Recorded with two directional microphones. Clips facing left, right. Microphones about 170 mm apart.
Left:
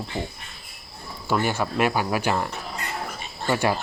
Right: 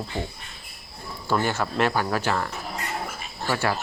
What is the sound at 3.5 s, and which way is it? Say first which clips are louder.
Speech: left 3 dB; 20° left (ahead or behind).